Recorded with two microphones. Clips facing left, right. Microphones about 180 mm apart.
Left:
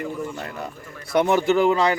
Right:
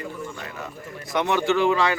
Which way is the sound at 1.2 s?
40° left (ahead or behind).